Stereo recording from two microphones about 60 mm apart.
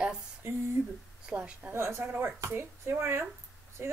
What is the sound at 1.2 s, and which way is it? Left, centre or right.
Speech, centre.